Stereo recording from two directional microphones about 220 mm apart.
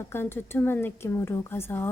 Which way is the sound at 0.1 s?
10° left (ahead or behind).